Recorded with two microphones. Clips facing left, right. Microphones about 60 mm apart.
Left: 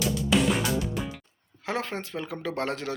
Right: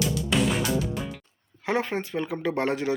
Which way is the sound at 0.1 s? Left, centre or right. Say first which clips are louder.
Left 1 dB; centre.